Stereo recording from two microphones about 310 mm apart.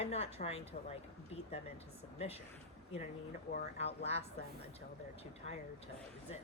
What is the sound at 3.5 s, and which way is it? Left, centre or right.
Speech, centre.